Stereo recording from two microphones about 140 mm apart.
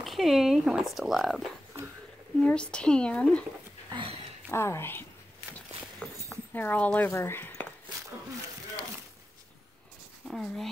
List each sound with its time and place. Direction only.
0.0 s speech: centre (ahead or behind)
2.4 s speech: 5° left (ahead or behind)
3.9 s a sound: 45° right (ahead or behind)
4.5 s speech: 20° left (ahead or behind)
6.0 s a sound: 10° left (ahead or behind)
6.5 s speech: 15° left (ahead or behind)
10.2 s speech: centre (ahead or behind)